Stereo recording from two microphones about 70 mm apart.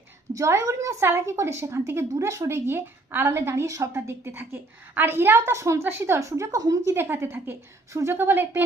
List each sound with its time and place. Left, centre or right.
0.3 s a woman's voice: right
6.9 s a woman's voice: right